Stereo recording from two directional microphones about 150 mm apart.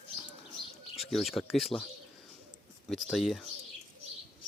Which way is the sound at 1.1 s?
Centre (ahead or behind).